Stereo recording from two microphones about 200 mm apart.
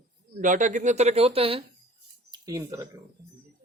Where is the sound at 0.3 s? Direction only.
40° right (ahead or behind); by 3.0 s 15° right (ahead or behind).